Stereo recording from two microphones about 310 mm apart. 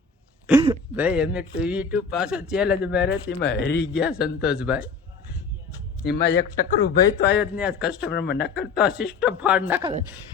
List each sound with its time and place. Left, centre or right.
0.5 s a sound: centre
0.9 s speech: centre
3.2 s speech: left
4.0 s speech: centre
6.1 s speech: left
7.4 s speech: centre
8.1 s speech: left
8.7 s speech: centre